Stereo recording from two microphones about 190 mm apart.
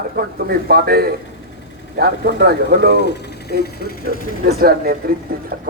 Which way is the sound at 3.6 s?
50° left (ahead or behind).